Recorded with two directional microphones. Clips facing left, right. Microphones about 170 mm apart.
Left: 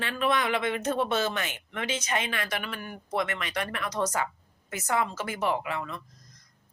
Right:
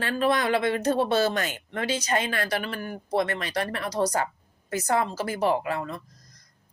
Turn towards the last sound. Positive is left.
turn(degrees=-40)  # may be behind; listen again after turning